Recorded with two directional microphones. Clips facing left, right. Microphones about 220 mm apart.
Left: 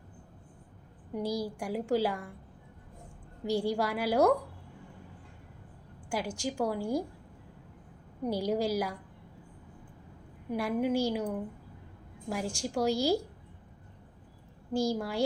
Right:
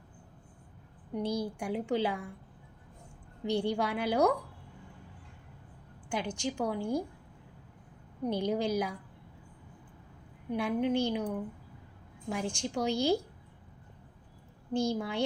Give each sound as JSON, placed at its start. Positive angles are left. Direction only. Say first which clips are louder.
{"t": 1.1, "sound": "a woman's voice", "louder": "even", "side_deg": 0}
{"t": 3.4, "sound": "a woman's voice", "louder": "left 1 dB", "side_deg": 5}
{"t": 6.1, "sound": "a woman's voice", "louder": "even", "side_deg": 5}
{"t": 8.2, "sound": "a woman's voice", "louder": "left 1 dB", "side_deg": 5}
{"t": 10.5, "sound": "a woman's voice", "louder": "even", "side_deg": 5}
{"t": 12.3, "sound": "a woman's voice", "louder": "even", "side_deg": 5}
{"t": 14.7, "sound": "a woman's voice", "louder": "left 1 dB", "side_deg": 5}